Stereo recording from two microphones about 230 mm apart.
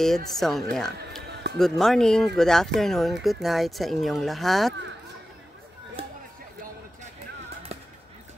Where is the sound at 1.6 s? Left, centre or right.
Centre.